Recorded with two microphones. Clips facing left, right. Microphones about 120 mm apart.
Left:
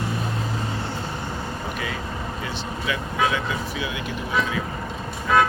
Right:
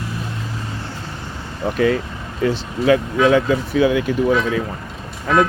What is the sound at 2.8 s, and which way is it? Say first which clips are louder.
Speech: right 11 dB; 45° right (ahead or behind).